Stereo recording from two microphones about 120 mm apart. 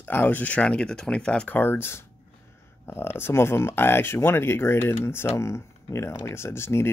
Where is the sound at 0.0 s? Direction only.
15° left (ahead or behind).